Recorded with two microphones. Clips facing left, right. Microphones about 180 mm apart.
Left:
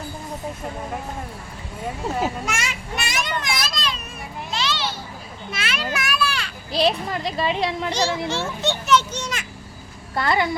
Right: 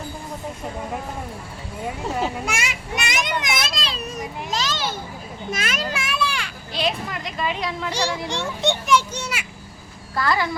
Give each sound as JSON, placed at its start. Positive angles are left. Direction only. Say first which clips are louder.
{"t": 2.1, "sound": "a child's voice", "louder": "even", "side_deg": 5}
{"t": 2.6, "sound": "a child's voice", "louder": "right 1 dB", "side_deg": -15}
{"t": 5.9, "sound": "children playing", "louder": "left 1 dB", "side_deg": -25}
{"t": 6.7, "sound": "speech", "louder": "left 5 dB", "side_deg": 30}
{"t": 8.3, "sound": "a child's voice", "louder": "right 1 dB", "side_deg": -15}
{"t": 10.2, "sound": "speech", "louder": "left 1 dB", "side_deg": 25}